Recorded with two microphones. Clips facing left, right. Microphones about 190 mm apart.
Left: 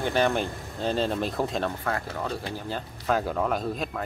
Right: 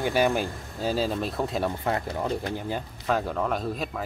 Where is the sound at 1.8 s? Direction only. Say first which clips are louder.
Right 3 dB; 20° right (ahead or behind).